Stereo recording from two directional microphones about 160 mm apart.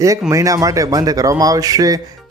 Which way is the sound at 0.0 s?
20° right (ahead or behind).